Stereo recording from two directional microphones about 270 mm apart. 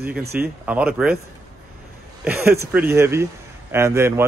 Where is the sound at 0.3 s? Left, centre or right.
Centre.